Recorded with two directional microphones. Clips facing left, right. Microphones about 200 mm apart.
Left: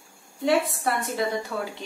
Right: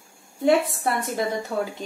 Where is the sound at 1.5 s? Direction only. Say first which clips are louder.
Right 4 dB; 40° right (ahead or behind).